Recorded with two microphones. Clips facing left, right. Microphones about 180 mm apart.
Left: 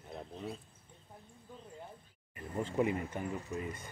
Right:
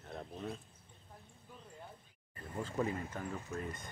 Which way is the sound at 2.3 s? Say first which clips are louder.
Left 4 dB; 15° left (ahead or behind).